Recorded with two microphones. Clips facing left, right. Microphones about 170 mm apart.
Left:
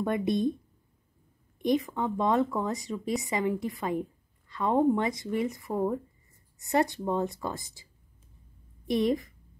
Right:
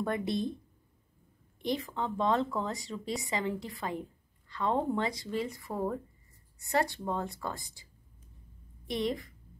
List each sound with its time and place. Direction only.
0.0 s speech: 20° left (ahead or behind)
1.6 s speech: 20° left (ahead or behind)
8.8 s a woman's voice: 25° right (ahead or behind)